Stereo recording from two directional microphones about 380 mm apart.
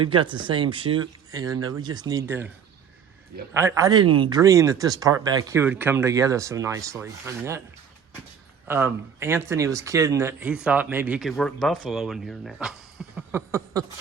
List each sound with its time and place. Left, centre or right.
0.0 s speech: centre
3.5 s speech: centre
8.6 s speech: centre